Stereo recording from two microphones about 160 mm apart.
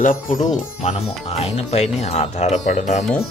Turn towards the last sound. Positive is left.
turn(degrees=50)  # may be behind; listen again after turning